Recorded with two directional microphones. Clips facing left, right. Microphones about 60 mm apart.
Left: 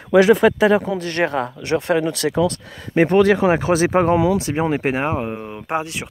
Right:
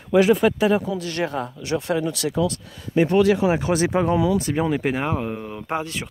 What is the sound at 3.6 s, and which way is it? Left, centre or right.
Speech, left.